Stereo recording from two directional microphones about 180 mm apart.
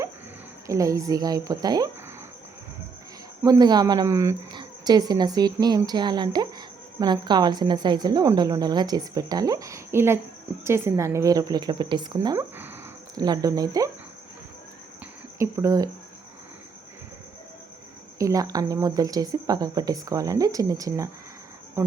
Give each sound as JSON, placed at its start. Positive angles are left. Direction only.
{"t": 0.7, "sound": "a woman's voice", "side_deg": -20}
{"t": 3.4, "sound": "a woman's voice", "side_deg": -20}
{"t": 15.4, "sound": "speech", "side_deg": -15}
{"t": 18.2, "sound": "a woman's voice", "side_deg": -20}